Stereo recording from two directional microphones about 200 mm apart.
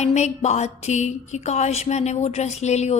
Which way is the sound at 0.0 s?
35° left (ahead or behind).